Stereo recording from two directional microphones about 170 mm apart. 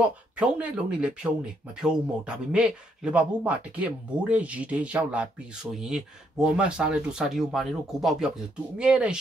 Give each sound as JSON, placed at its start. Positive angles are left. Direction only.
{"t": 0.0, "sound": "speech", "side_deg": -10}